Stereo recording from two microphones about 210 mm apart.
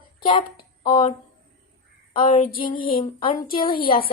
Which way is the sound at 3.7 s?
45° left (ahead or behind).